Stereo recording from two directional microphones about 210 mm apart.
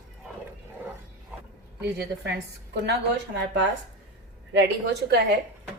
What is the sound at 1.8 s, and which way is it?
Speech, 55° right (ahead or behind).